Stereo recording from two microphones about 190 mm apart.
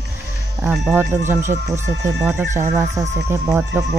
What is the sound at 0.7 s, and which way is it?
Speech, 5° right (ahead or behind).